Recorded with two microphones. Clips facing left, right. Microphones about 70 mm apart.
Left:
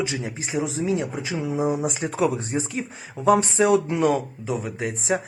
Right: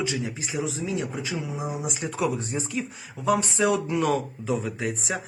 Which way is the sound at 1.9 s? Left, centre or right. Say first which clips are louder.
Left 4 dB; left.